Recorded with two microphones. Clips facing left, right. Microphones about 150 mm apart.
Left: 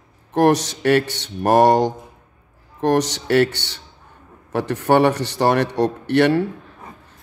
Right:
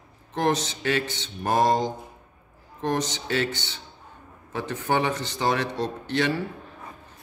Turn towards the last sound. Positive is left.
turn(degrees=65)  # may be behind; listen again after turning